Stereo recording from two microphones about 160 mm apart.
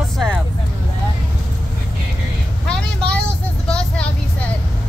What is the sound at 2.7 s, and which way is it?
Vehicle, 5° left (ahead or behind).